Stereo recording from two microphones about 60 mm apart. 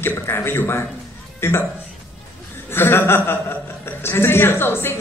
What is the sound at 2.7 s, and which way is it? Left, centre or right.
A woman's voice, left.